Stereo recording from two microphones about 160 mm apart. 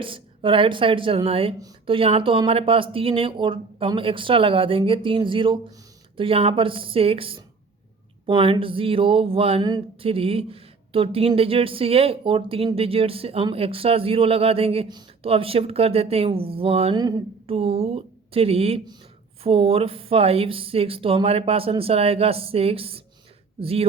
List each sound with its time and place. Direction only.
0.0 s speech: 35° right (ahead or behind)
16.9 s speech: 25° right (ahead or behind)